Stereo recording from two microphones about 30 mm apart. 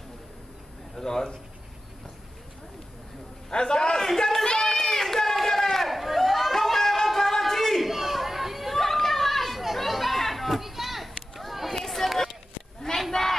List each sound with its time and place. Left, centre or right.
0.9 s speech: centre
3.4 s a man's voice: left
4.6 s run: centre
5.9 s a sound: centre
9.8 s children playing: centre
13.1 s crowd: centre